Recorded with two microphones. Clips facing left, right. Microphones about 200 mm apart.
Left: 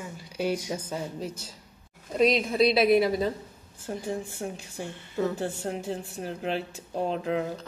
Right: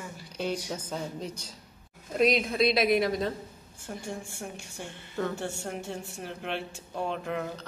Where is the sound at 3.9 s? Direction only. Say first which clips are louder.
Left 5 dB; 35° left (ahead or behind).